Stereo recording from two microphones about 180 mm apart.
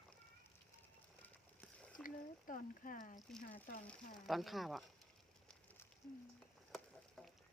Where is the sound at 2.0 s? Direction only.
50° left (ahead or behind).